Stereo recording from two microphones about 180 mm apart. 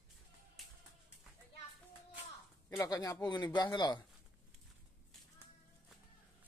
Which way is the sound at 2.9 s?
20° left (ahead or behind).